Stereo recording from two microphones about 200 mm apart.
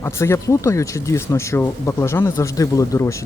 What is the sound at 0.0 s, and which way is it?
Speech, 15° left (ahead or behind).